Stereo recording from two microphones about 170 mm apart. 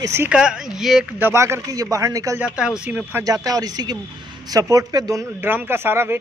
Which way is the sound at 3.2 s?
20° right (ahead or behind).